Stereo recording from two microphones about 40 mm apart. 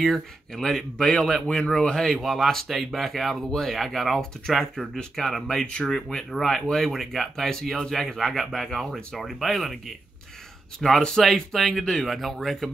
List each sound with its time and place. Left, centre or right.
0.0 s speech: centre
2.1 s speech: centre
3.4 s speech: centre
3.7 s speech: centre
10.8 s speech: centre